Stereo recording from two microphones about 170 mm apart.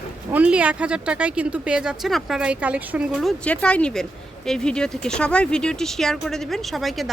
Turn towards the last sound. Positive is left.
turn(degrees=0)  # may be behind; listen again after turning